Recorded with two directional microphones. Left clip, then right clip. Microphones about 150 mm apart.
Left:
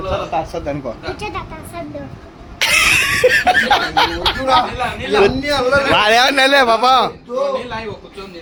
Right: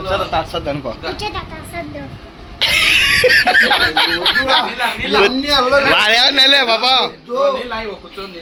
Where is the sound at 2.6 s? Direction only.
60° left (ahead or behind); by 3.5 s 35° left (ahead or behind).